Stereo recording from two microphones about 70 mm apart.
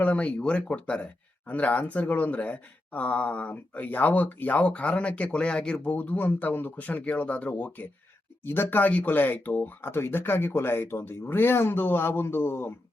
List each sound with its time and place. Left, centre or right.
0.0 s speech: left